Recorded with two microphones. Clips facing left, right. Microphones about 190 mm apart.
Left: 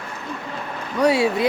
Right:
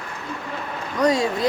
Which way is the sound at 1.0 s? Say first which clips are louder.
Left 2 dB; 10° left (ahead or behind).